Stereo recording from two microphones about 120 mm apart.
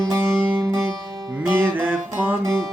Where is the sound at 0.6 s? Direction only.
35° right (ahead or behind).